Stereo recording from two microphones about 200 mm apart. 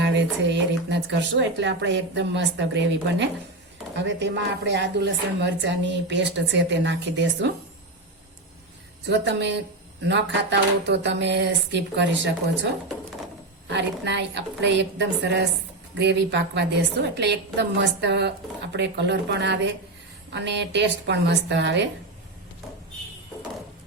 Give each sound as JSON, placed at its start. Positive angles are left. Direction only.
{"t": 0.0, "sound": "a woman's voice", "side_deg": -60}
{"t": 9.0, "sound": "a woman's voice", "side_deg": -60}
{"t": 13.7, "sound": "a woman's voice", "side_deg": -60}